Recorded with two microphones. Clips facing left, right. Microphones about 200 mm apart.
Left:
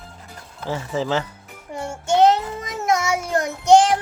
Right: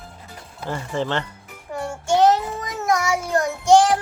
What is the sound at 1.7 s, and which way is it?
Child singing, 20° left (ahead or behind).